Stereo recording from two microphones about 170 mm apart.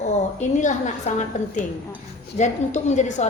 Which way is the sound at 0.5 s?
45° left (ahead or behind).